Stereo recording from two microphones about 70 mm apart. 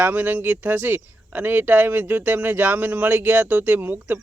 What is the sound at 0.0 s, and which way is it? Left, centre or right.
Speech, right.